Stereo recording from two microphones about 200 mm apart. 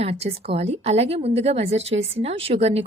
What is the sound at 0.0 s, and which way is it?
A woman's voice, 30° right (ahead or behind).